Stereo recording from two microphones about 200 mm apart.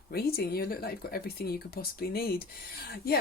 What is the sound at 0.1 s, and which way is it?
Speech, 50° left (ahead or behind).